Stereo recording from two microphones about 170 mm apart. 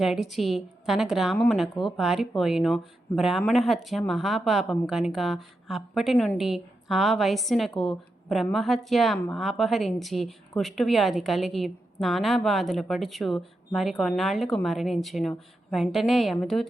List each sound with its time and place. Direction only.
0.0 s a woman's voice: centre (ahead or behind)